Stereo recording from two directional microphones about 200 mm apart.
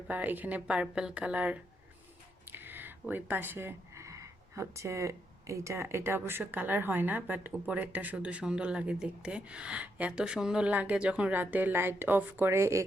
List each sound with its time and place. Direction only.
0.1 s speech: 10° right (ahead or behind)